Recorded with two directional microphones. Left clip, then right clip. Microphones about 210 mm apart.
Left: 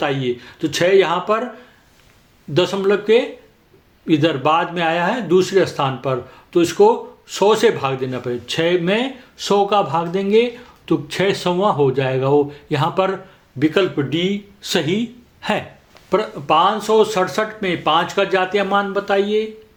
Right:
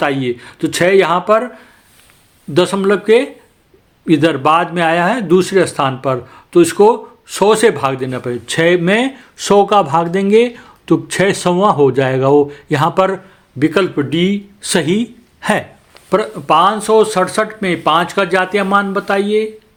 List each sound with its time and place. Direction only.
0.0 s a man's voice: 35° right (ahead or behind)
2.5 s a man's voice: 35° right (ahead or behind)